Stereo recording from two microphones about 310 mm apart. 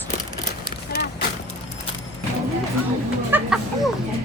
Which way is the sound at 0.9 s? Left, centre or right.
Left.